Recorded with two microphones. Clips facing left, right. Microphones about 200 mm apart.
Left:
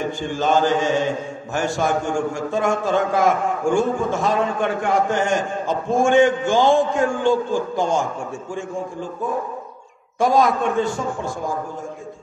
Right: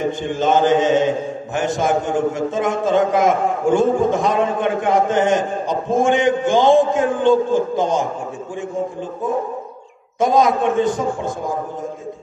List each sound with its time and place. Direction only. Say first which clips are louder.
0.0 s a man's voice: right 3 dB; 20° right (ahead or behind)
10.1 s a man's voice: right 2 dB; 20° right (ahead or behind)